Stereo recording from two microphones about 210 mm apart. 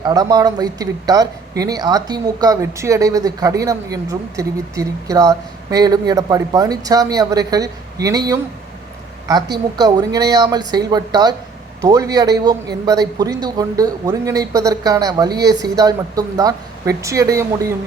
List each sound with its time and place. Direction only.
0.0 s speech: 20° right (ahead or behind)
9.7 s speech: 20° right (ahead or behind)